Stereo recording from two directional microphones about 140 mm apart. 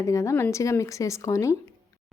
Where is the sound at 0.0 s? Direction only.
20° left (ahead or behind).